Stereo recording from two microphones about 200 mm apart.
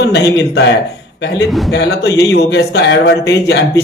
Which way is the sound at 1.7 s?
60° left (ahead or behind).